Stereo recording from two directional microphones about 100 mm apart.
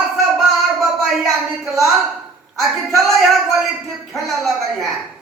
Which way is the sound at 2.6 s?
Centre (ahead or behind).